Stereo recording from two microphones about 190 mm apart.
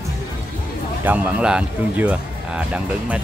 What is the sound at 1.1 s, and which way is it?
Speech, 5° right (ahead or behind).